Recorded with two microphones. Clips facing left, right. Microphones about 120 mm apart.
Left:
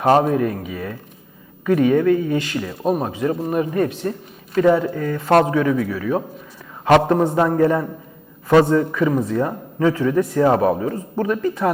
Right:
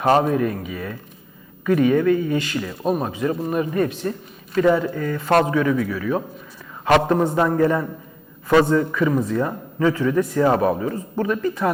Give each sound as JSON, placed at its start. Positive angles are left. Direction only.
{"t": 0.1, "sound": "a man's voice", "side_deg": 40}